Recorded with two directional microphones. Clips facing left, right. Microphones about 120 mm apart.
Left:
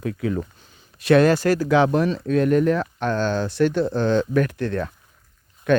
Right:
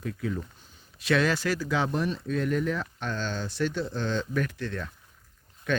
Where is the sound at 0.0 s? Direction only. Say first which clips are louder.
Left 7 dB; 70° left (ahead or behind).